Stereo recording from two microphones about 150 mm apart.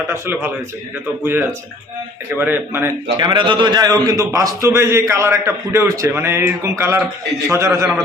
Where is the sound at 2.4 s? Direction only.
15° right (ahead or behind).